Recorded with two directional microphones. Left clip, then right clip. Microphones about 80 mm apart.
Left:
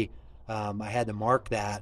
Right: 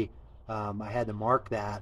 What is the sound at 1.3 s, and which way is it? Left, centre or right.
Speech, left.